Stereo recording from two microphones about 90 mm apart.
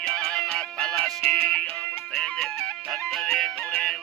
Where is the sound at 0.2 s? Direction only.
10° left (ahead or behind).